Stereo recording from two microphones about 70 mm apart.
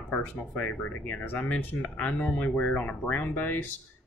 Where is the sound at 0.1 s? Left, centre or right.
Left.